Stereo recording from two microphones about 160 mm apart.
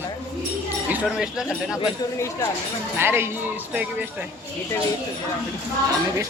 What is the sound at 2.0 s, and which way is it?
Speech, 25° left (ahead or behind).